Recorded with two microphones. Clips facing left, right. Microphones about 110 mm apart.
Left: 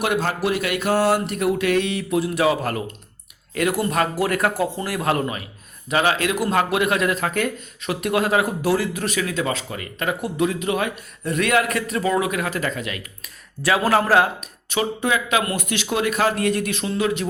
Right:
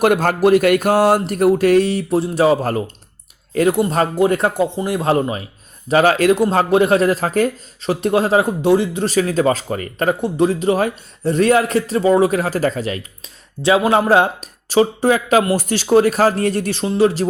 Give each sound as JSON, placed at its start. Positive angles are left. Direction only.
{"t": 0.0, "sound": "a man's voice", "side_deg": -50}
{"t": 5.9, "sound": "speech", "side_deg": -40}
{"t": 6.3, "sound": "speech", "side_deg": -30}